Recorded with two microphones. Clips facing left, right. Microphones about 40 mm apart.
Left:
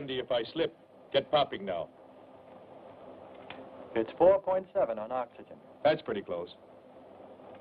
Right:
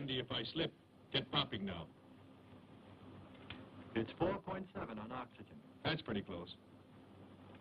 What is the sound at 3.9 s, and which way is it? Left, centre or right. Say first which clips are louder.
A man's voice: left 14 dB; centre.